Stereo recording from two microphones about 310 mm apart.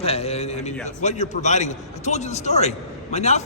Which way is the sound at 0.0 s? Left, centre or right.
Centre.